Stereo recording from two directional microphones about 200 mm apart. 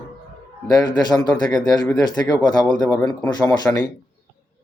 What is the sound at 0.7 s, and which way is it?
Speech, 20° left (ahead or behind).